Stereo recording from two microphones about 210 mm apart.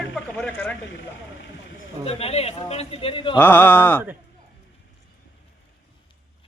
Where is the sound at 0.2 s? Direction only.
10° left (ahead or behind).